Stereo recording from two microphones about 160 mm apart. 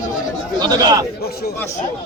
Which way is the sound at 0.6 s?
25° right (ahead or behind).